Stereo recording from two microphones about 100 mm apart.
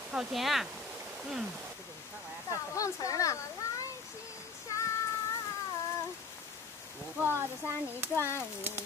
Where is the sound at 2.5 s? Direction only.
30° left (ahead or behind).